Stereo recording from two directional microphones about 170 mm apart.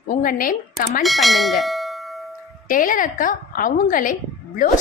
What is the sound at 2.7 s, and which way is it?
Speech, 55° left (ahead or behind).